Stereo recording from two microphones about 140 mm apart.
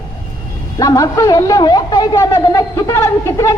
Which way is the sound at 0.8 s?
25° left (ahead or behind).